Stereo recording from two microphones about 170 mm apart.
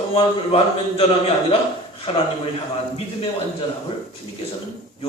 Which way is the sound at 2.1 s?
35° left (ahead or behind).